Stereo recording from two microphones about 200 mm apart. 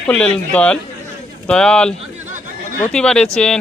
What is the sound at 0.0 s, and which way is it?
Speech, 5° left (ahead or behind).